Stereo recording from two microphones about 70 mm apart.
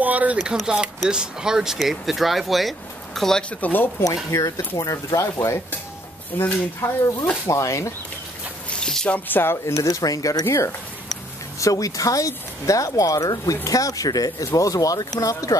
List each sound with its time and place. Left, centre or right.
0.0 s speech: right
0.7 s speech: centre
3.4 s speech: left
4.0 s speech: left
6.3 s speech: left
7.4 s speech: left
8.6 s a sound: centre
9.1 s speech: left
9.8 s speech: left
10.4 s speech: left
11.6 s speech: left